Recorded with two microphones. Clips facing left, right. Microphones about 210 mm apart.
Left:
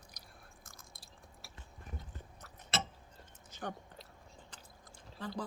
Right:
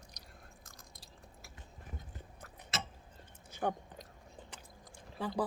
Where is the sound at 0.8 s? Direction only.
35° right (ahead or behind).